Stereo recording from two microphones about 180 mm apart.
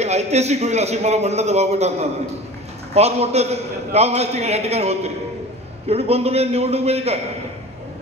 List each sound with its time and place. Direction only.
0.0 s a man's voice: 40° right (ahead or behind)